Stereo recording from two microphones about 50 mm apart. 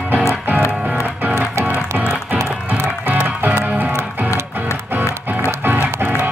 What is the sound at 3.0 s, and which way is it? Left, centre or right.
Music, right.